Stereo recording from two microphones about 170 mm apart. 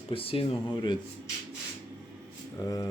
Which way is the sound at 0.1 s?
35° left (ahead or behind).